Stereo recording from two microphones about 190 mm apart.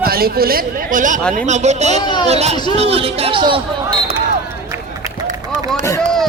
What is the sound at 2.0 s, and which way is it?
Speech, 25° left (ahead or behind).